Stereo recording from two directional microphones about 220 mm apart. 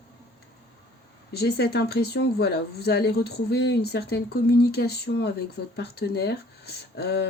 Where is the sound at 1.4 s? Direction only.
50° left (ahead or behind).